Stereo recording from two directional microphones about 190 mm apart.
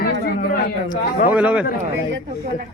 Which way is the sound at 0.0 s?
55° left (ahead or behind).